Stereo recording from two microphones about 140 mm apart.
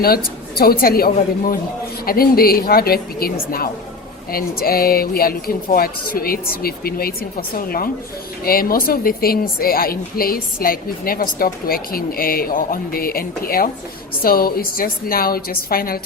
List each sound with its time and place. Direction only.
0.0 s a woman's voice: 90° left